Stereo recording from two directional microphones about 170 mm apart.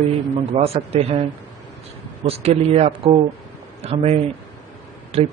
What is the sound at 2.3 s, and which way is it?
Speech, 35° right (ahead or behind).